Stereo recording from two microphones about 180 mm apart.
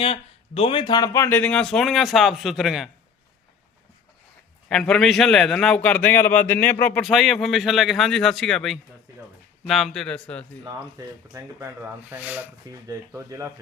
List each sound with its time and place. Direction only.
0.0 s speech: 30° left (ahead or behind); by 2.9 s centre (ahead or behind)
4.7 s speech: 5° left (ahead or behind)
10.6 s speech: 20° right (ahead or behind)